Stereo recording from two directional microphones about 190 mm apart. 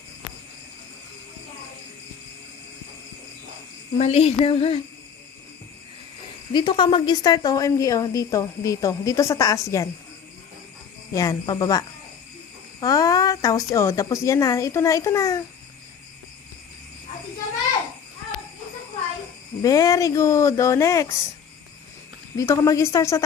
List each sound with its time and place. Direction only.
3.9 s speech: 35° left (ahead or behind)
6.5 s a woman's voice: 25° left (ahead or behind)
11.1 s a woman's voice: 20° left (ahead or behind)
19.6 s a woman's voice: 15° left (ahead or behind)
22.4 s a woman's voice: 15° left (ahead or behind)